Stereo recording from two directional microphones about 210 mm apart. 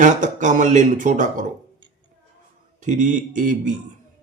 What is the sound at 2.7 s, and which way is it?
Speech, 35° right (ahead or behind).